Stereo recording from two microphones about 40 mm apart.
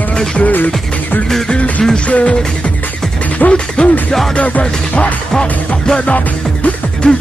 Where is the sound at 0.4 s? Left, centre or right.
Left.